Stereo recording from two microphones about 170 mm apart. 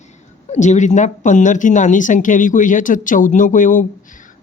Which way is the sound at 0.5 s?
45° left (ahead or behind).